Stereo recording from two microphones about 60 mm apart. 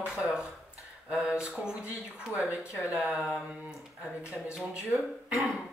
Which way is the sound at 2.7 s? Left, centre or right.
Left.